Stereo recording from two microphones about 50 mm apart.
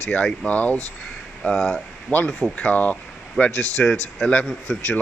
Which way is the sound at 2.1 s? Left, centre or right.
Left.